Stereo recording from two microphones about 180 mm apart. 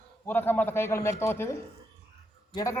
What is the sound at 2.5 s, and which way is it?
Speech, 20° left (ahead or behind).